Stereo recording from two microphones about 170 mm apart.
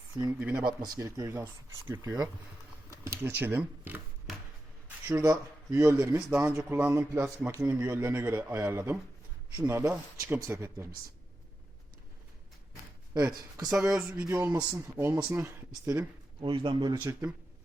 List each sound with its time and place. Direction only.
0.3 s speech: 10° right (ahead or behind)
0.6 s speech: 25° right (ahead or behind)
5.0 s speech: 15° right (ahead or behind)
13.7 s speech: 5° right (ahead or behind)
14.3 s speech: 20° right (ahead or behind)
16.9 s speech: 15° right (ahead or behind)